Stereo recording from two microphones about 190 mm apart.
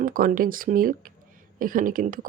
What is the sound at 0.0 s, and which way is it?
A woman's voice, 45° right (ahead or behind).